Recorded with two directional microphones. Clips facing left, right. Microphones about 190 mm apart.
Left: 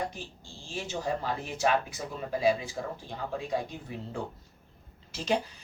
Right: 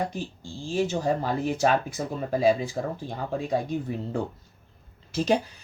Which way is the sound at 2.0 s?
60° right (ahead or behind).